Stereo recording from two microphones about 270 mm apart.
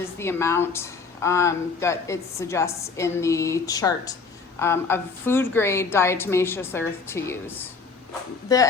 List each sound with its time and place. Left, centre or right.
0.2 s speech: centre